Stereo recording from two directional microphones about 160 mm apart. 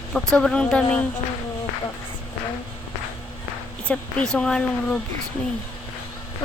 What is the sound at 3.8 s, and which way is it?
A woman's voice, 5° left (ahead or behind).